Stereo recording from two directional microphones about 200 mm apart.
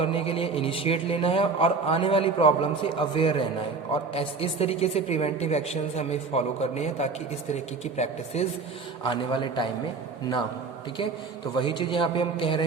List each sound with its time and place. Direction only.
0.0 s a man's voice: 30° left (ahead or behind)
11.5 s a man's voice: 25° left (ahead or behind)